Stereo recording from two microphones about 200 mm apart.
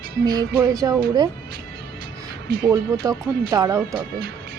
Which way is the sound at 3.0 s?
15° right (ahead or behind).